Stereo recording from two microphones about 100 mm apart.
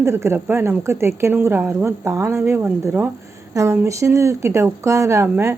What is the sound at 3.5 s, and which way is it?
Speech, 30° right (ahead or behind).